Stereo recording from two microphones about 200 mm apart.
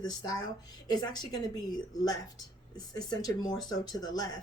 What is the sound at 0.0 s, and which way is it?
Speech, 20° left (ahead or behind).